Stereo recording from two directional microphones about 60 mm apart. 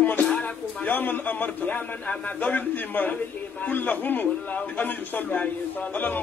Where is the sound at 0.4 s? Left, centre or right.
Left.